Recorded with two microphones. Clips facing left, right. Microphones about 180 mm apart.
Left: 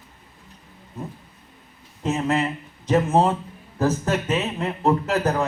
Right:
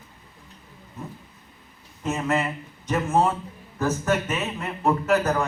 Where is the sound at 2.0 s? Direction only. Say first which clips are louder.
Left 2 dB; 35° left (ahead or behind).